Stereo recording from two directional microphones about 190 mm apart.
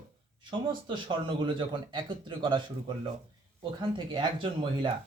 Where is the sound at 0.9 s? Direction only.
25° right (ahead or behind).